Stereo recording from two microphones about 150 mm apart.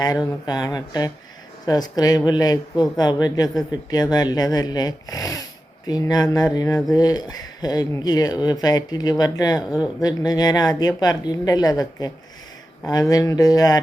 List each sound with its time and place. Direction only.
0.4 s speech: 25° left (ahead or behind)
9.6 s speech: 5° right (ahead or behind)
10.0 s speech: 25° left (ahead or behind)